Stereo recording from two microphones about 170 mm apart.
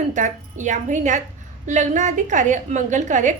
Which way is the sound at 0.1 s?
45° right (ahead or behind).